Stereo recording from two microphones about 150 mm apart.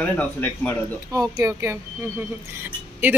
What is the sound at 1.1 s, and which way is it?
Speech, 20° right (ahead or behind).